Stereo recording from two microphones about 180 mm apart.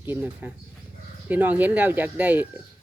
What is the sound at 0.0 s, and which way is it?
Speech, 10° right (ahead or behind).